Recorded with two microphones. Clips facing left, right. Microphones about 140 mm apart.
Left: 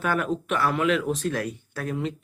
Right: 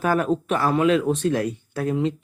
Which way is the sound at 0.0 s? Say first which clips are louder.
Right 5 dB; 35° right (ahead or behind).